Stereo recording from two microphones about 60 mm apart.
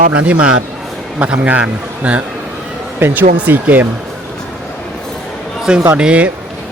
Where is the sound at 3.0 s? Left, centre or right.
Right.